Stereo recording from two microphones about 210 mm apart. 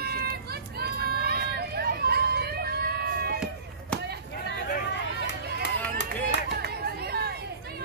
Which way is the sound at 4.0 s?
50° right (ahead or behind).